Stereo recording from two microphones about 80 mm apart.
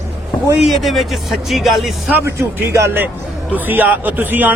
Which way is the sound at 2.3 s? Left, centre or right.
Right.